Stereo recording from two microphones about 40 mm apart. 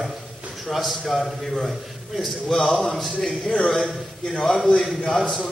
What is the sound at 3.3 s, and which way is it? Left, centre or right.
Speech, centre.